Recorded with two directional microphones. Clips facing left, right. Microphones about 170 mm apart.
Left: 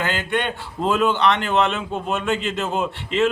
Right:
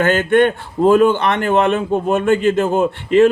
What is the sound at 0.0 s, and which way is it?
A man's voice, 50° right (ahead or behind).